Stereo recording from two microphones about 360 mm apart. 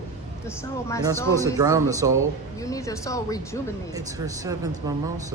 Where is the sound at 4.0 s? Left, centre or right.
Centre.